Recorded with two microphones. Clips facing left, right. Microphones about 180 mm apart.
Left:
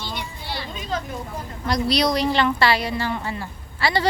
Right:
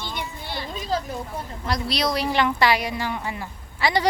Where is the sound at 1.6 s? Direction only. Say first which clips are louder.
Left 4 dB; centre (ahead or behind).